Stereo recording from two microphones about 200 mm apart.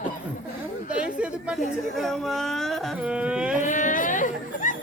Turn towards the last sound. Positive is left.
turn(degrees=40)  # may be behind; listen again after turning